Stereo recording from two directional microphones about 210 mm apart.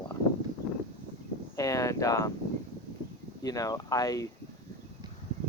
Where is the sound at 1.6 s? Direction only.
15° left (ahead or behind).